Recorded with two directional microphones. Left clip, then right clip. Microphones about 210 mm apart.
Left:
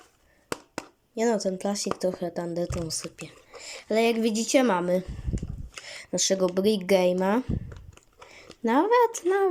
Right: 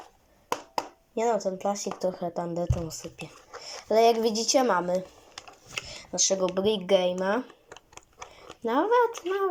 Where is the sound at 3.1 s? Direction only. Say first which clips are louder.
Right 1 dB; 20° left (ahead or behind).